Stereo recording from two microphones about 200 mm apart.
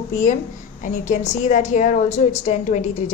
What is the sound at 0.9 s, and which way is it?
A woman's voice, 40° left (ahead or behind).